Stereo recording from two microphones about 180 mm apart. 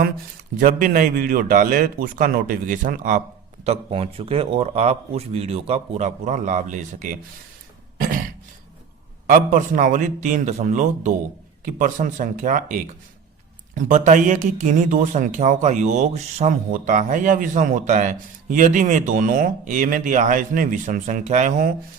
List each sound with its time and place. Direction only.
0.6 s speech: 50° right (ahead or behind)
3.6 s speech: 35° right (ahead or behind)
7.9 s throat clearing: 50° right (ahead or behind)
9.2 s speech: 50° right (ahead or behind)